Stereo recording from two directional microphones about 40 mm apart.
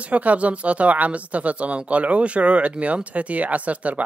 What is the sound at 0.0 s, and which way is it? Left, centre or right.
Speech, right.